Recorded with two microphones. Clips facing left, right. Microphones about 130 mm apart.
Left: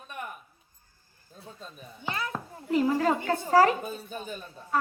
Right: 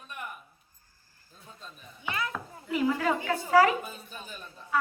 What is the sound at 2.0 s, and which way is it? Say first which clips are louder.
A child's voice: even; 35° left (ahead or behind).